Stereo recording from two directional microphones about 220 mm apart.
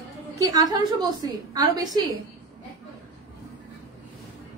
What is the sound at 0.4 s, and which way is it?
A woman's voice, 15° right (ahead or behind).